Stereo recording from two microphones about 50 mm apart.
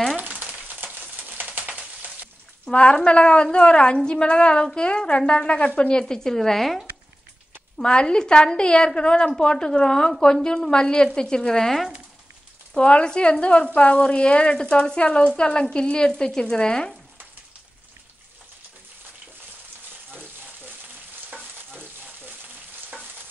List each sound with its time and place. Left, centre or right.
0.1 s frying: right
0.8 s a sound: right
2.6 s a woman's voice: left; by 6.9 s centre
7.7 s a woman's voice: centre
12.8 s a woman's voice: centre
20.2 s frying: right
21.3 s stir: right